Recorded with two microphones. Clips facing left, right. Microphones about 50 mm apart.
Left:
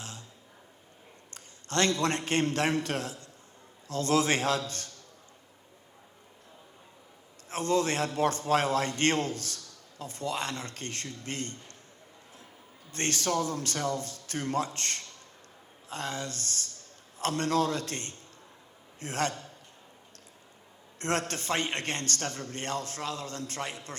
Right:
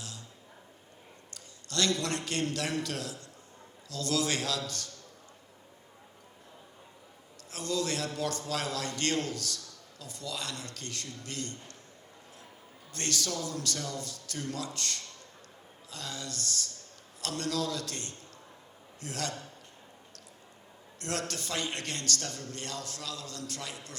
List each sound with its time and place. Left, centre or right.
1.3 s a man's voice: left
7.5 s a man's voice: left
12.9 s a man's voice: left
21.0 s a man's voice: left